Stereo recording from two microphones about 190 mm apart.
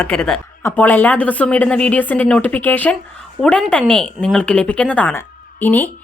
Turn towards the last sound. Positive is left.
turn(degrees=10)  # may be behind; listen again after turning